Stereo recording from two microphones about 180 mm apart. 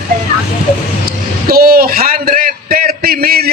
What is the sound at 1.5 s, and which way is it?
A man's voice, 55° right (ahead or behind).